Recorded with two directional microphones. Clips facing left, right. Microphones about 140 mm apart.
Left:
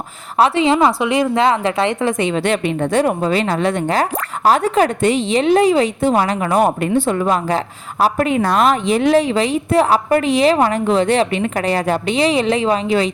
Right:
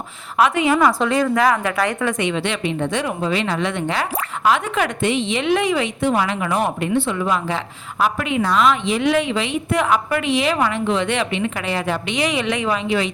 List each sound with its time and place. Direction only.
0.3 s a woman's voice: 30° left (ahead or behind)
2.5 s a woman's voice: 45° left (ahead or behind)